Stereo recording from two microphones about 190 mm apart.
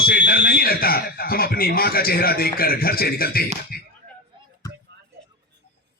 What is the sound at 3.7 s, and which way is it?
Chop, 50° left (ahead or behind).